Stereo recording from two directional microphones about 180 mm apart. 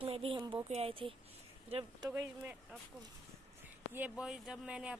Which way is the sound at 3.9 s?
5° right (ahead or behind).